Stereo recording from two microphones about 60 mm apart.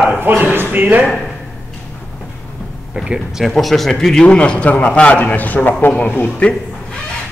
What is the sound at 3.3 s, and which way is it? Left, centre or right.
A man's voice, centre.